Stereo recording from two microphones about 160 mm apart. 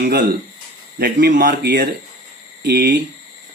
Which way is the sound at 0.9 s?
70° right (ahead or behind).